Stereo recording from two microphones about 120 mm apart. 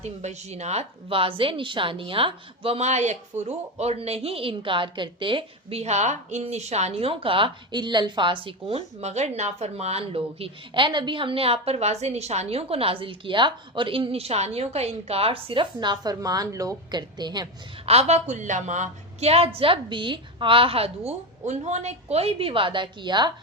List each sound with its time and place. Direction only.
0.0 s a woman's voice: 70° right (ahead or behind); by 17.5 s 35° right (ahead or behind)
17.8 s a woman's voice: 65° right (ahead or behind)
19.5 s a woman's voice: 45° right (ahead or behind)